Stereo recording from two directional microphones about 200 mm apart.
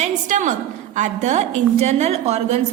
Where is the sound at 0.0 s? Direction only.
35° right (ahead or behind).